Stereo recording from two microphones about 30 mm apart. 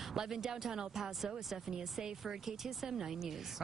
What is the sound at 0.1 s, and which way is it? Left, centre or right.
Speech, centre.